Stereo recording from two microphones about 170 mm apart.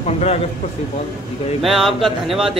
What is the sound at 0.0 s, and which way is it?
Speech, 40° left (ahead or behind).